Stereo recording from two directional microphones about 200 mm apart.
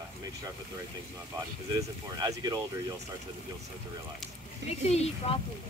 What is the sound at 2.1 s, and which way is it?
Speech, 20° right (ahead or behind).